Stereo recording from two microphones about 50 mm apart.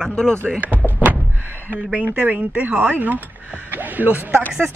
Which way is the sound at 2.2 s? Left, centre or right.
Right.